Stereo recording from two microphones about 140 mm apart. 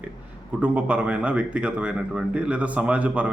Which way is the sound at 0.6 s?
10° right (ahead or behind).